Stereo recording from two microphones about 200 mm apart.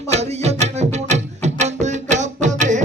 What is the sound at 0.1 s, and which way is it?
Music, 35° right (ahead or behind).